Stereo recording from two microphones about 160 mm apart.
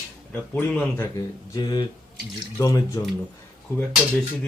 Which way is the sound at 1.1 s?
25° left (ahead or behind).